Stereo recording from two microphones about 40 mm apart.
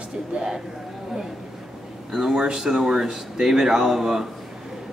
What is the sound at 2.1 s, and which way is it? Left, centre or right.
Speech, centre.